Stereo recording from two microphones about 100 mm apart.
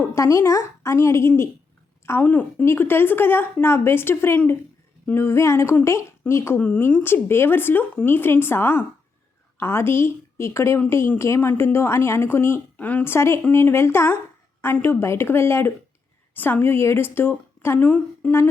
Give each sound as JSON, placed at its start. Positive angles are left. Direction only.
{"t": 0.0, "sound": "a woman's voice", "side_deg": 30}
{"t": 13.1, "sound": "a woman's voice", "side_deg": 25}